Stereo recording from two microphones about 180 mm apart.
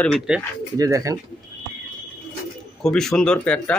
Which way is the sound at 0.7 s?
15° right (ahead or behind).